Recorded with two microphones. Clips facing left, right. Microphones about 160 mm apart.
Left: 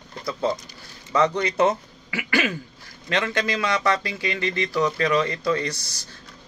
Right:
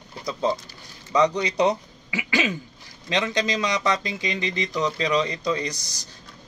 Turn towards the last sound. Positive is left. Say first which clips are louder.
# left 2 dB
turn(degrees=-15)  # may be behind; listen again after turning